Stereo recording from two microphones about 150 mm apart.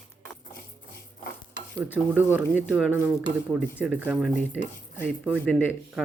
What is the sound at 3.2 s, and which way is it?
Speech, 10° right (ahead or behind).